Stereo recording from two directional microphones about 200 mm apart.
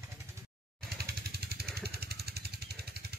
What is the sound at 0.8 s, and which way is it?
Vehicle, 50° right (ahead or behind).